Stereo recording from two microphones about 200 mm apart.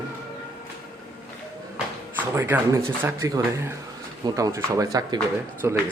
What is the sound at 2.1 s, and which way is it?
Speech, 10° right (ahead or behind).